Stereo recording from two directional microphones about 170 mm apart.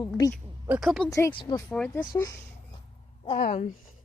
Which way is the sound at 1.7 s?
10° left (ahead or behind).